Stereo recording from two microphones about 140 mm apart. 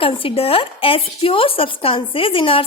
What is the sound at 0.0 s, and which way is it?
Speech, 40° left (ahead or behind).